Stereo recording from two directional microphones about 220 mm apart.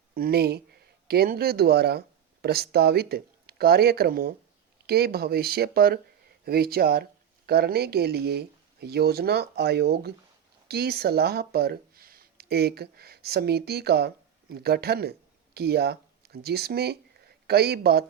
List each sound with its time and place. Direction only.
0.1 s speech: 45° right (ahead or behind)